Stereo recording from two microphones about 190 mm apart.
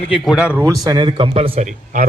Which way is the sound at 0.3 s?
5° right (ahead or behind).